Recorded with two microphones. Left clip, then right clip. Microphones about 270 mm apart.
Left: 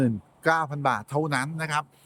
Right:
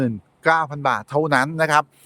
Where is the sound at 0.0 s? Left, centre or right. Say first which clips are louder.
Right 4 dB; centre.